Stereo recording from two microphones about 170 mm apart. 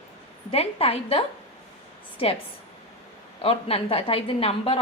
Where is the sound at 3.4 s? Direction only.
35° left (ahead or behind).